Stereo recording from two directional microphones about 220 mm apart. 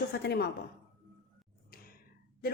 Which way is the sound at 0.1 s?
50° left (ahead or behind).